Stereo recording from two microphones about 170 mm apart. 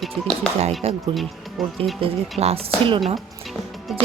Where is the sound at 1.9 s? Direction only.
35° right (ahead or behind).